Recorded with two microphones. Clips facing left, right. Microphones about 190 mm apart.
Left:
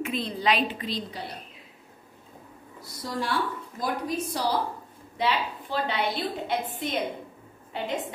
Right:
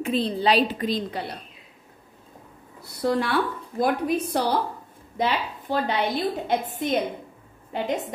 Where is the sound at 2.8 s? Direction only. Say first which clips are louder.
Right 8 dB; 65° right (ahead or behind).